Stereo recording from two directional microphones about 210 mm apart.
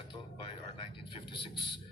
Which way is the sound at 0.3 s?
25° left (ahead or behind).